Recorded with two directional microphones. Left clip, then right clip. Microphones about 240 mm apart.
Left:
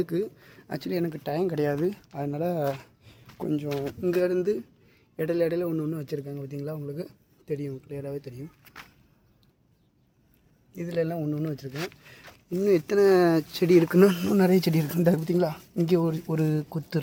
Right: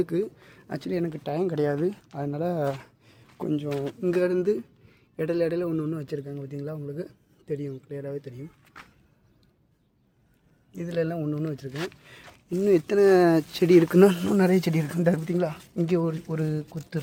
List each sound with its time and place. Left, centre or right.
0.0 s speech: centre
4.1 s a man's voice: centre
8.6 s vehicle: centre
10.7 s a man's voice: centre